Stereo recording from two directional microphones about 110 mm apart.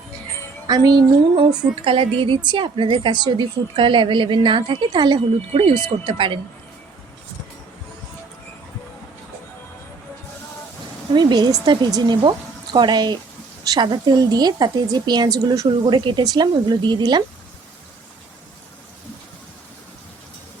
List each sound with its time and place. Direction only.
0.7 s a woman's voice: 35° right (ahead or behind)
1.8 s a woman's voice: 55° right (ahead or behind)
11.1 s a woman's voice: 40° right (ahead or behind)
15.8 s a woman's voice: 45° right (ahead or behind)